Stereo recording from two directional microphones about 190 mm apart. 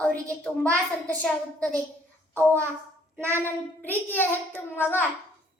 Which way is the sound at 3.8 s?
10° left (ahead or behind).